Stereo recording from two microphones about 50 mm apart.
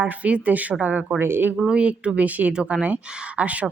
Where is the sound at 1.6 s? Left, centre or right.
Right.